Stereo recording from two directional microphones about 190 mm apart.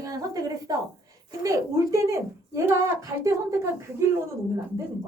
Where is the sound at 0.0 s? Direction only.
20° right (ahead or behind).